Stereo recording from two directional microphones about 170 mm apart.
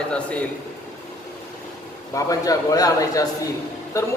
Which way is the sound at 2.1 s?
20° left (ahead or behind).